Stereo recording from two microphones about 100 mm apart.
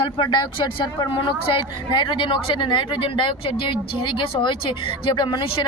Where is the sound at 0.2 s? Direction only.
50° left (ahead or behind).